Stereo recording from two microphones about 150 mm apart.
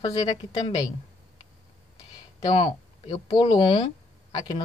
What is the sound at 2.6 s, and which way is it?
Speech, 35° left (ahead or behind).